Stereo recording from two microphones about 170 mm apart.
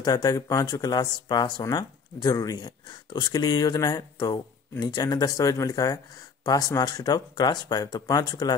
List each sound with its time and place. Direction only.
0.0 s speech: 20° left (ahead or behind)